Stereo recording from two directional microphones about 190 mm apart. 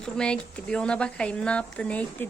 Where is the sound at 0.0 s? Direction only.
5° left (ahead or behind).